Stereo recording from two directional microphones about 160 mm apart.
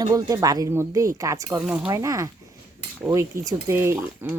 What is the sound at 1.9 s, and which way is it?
Speech, 20° right (ahead or behind).